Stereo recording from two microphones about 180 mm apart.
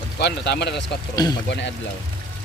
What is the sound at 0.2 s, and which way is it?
Speech, 65° left (ahead or behind).